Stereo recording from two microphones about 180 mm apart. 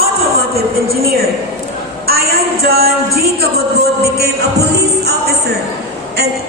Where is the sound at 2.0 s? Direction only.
60° right (ahead or behind).